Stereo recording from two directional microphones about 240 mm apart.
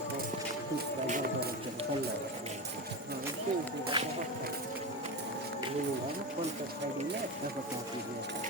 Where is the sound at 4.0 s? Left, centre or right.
Right.